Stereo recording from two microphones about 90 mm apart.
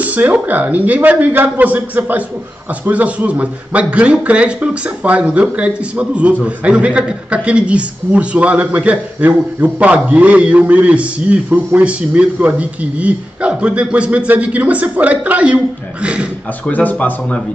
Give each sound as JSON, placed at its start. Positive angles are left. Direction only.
{"t": 0.0, "sound": "a man's voice", "side_deg": -15}
{"t": 16.6, "sound": "speech", "side_deg": 20}